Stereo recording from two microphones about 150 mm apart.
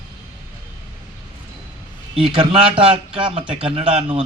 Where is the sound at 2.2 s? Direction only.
35° right (ahead or behind).